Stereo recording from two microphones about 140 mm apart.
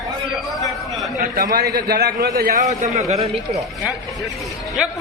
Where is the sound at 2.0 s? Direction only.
90° right.